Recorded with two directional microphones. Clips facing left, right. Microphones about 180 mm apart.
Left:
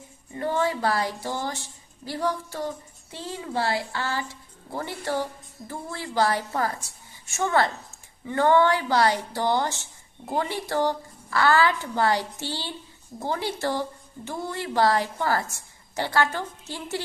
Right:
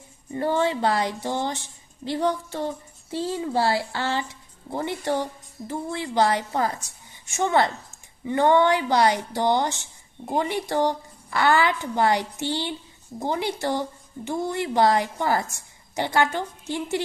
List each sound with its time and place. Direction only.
0.3 s a woman's voice: 30° right (ahead or behind)